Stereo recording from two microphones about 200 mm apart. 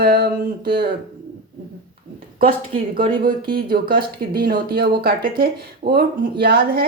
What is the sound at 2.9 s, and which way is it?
A woman's voice, 45° right (ahead or behind).